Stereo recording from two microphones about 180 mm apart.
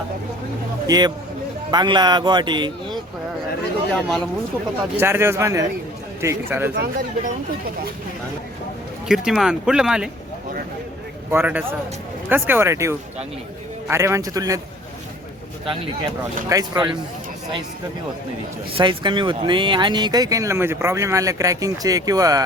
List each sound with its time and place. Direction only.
0.9 s speech: 25° right (ahead or behind)
3.9 s speech: 5° left (ahead or behind)
4.9 s speech: 15° right (ahead or behind)
6.7 s speech: 60° right (ahead or behind)
9.0 s speech: centre (ahead or behind)
11.3 s speech: 10° right (ahead or behind)
16.5 s speech: 20° right (ahead or behind)
18.8 s speech: 25° right (ahead or behind)